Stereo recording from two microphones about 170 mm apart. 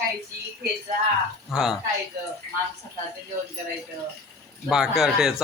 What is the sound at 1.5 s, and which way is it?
Speech, 5° right (ahead or behind).